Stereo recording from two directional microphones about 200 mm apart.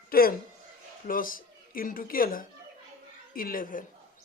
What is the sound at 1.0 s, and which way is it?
A woman's voice, 45° left (ahead or behind).